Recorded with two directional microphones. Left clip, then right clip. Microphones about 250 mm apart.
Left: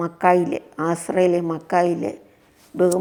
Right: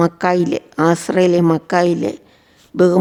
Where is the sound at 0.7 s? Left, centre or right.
Centre.